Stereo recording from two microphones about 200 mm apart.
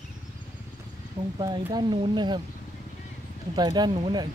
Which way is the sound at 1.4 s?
20° right (ahead or behind).